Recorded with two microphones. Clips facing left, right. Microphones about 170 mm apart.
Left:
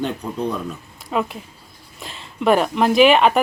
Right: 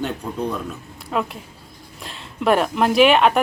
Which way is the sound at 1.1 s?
Centre (ahead or behind).